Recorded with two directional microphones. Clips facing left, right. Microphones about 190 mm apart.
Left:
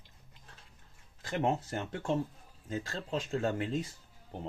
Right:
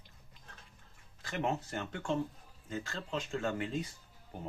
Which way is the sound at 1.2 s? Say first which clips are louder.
Left 4 dB; 35° left (ahead or behind).